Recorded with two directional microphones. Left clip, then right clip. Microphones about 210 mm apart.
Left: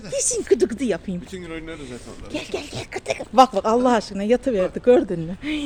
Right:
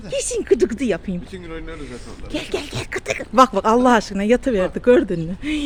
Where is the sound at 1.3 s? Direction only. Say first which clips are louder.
Even; 45° left (ahead or behind).